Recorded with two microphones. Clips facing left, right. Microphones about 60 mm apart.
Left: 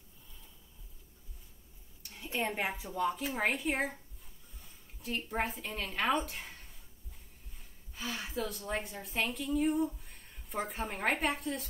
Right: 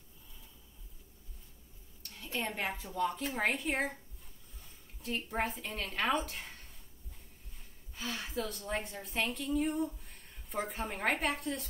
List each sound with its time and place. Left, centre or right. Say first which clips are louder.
2.0 s a sound: left 3 dB; centre
2.7 s a woman's voice: left 1 dB; centre
7.9 s a woman's voice: even; centre